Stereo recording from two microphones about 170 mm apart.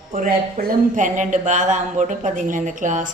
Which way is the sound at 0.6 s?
50° right (ahead or behind).